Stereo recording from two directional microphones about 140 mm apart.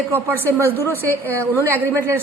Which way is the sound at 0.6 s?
15° left (ahead or behind).